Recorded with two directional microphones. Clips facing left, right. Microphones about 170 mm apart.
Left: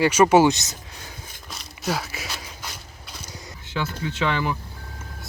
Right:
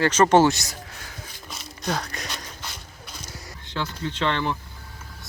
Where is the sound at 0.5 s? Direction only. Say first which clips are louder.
Right 1 dB; 20° left (ahead or behind).